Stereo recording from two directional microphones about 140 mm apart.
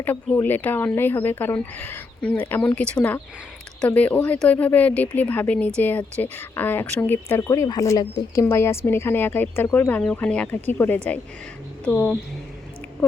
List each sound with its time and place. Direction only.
0.0 s speech: 10° left (ahead or behind)